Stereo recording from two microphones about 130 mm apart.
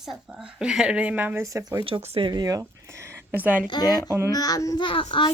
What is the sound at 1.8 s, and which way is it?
Speech, 45° right (ahead or behind).